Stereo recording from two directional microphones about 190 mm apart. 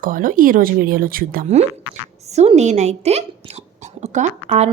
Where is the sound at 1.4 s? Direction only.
35° right (ahead or behind).